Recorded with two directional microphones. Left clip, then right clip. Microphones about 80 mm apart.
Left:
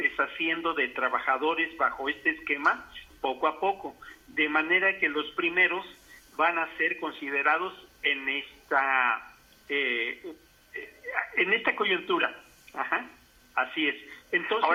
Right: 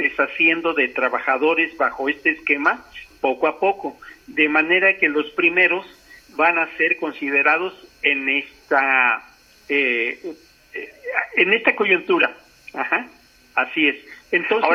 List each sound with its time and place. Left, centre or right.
0.0 s speech: right